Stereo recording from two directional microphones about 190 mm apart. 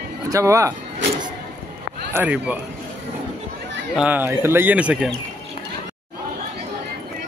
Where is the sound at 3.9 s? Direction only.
5° right (ahead or behind).